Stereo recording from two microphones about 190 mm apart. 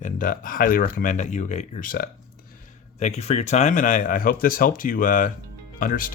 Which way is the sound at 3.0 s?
35° left (ahead or behind).